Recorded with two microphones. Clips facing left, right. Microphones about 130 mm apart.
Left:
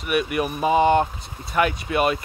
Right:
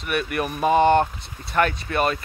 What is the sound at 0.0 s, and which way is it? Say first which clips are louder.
Speech: left 2 dB; 10° left (ahead or behind).